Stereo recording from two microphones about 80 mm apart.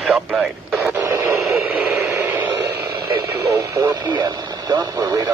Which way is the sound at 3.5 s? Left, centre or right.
Right.